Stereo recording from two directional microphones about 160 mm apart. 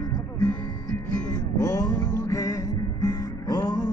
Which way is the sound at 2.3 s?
20° left (ahead or behind).